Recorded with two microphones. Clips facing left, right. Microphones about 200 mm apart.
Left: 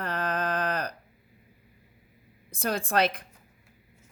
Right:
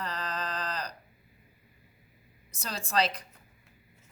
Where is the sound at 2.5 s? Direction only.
55° left (ahead or behind).